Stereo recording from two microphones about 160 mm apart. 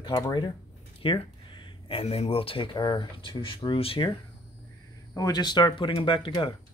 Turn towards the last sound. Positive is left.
turn(degrees=30)  # may be behind; listen again after turning